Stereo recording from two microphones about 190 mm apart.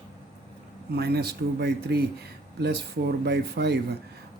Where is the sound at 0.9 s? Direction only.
55° right (ahead or behind).